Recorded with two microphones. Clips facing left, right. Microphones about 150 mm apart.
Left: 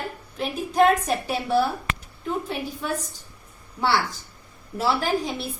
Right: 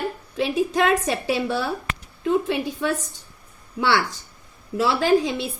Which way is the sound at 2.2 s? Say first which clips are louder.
Right 7 dB; 85° right.